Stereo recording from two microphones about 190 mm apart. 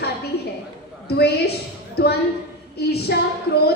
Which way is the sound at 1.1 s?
55° left (ahead or behind).